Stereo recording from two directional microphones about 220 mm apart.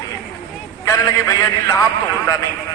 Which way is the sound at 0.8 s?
15° left (ahead or behind).